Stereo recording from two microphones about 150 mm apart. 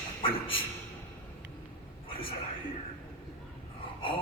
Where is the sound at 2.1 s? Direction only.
35° left (ahead or behind).